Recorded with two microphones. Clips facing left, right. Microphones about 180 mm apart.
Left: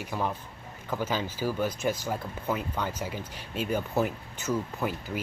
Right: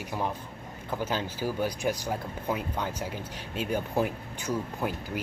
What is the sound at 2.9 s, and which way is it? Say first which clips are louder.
Speech: even; 10° left (ahead or behind).